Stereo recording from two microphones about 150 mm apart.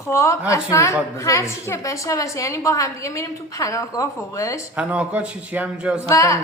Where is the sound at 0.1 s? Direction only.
20° left (ahead or behind).